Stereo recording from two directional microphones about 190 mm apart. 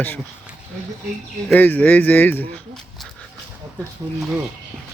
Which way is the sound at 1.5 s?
10° left (ahead or behind).